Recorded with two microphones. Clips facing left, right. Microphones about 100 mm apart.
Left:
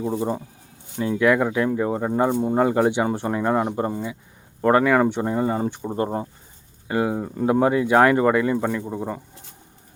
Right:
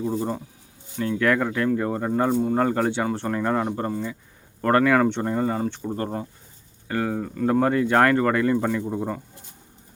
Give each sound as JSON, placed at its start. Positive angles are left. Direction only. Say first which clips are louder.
{"t": 0.0, "sound": "speech", "louder": "left 2 dB", "side_deg": 15}
{"t": 5.8, "sound": "speech", "louder": "left 3 dB", "side_deg": 25}
{"t": 6.8, "sound": "speech", "louder": "left 3 dB", "side_deg": 15}